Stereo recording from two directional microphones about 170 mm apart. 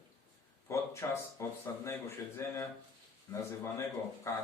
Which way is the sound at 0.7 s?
15° left (ahead or behind).